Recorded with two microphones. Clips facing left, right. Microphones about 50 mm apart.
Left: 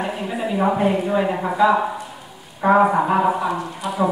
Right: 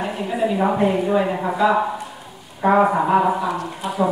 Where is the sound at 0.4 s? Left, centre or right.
Centre.